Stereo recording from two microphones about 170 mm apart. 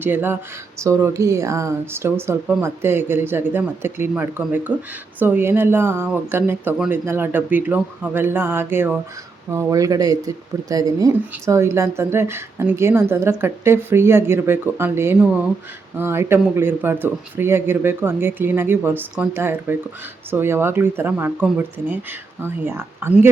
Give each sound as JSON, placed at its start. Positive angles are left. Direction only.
{"t": 0.0, "sound": "speech", "side_deg": -10}